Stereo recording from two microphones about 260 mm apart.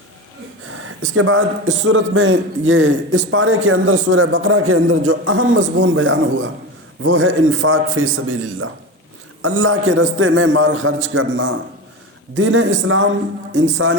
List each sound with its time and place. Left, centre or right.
0.8 s a man's voice: right
9.4 s a man's voice: right